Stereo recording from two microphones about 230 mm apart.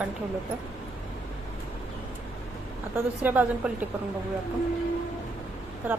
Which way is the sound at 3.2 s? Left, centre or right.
Centre.